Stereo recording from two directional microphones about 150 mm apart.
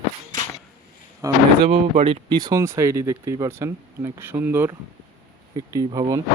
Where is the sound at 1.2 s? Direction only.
25° right (ahead or behind).